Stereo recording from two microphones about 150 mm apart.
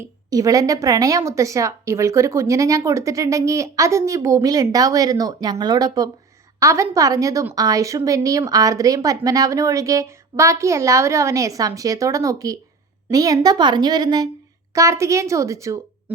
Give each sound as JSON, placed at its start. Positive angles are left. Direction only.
{"t": 0.0, "sound": "a woman's voice", "side_deg": -25}